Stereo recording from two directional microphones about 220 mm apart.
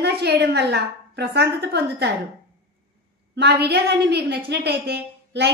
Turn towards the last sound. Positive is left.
turn(degrees=-50)  # may be behind; listen again after turning